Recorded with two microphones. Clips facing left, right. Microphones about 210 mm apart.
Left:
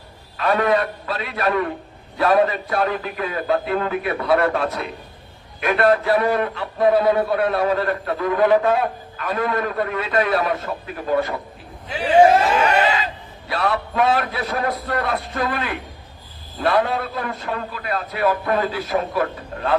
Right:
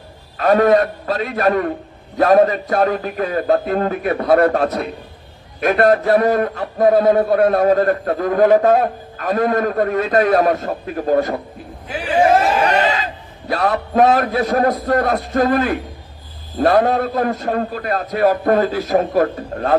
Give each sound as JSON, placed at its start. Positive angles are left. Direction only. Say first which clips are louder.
{"t": 0.3, "sound": "a man's voice", "louder": "right 6 dB", "side_deg": -45}
{"t": 13.5, "sound": "a man's voice", "louder": "right 4 dB", "side_deg": -40}